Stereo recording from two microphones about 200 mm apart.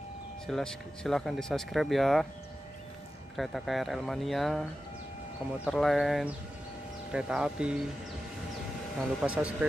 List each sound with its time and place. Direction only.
0.5 s speech: centre (ahead or behind)
3.3 s speech: centre (ahead or behind)
5.7 s speech: centre (ahead or behind)
9.0 s speech: 5° right (ahead or behind)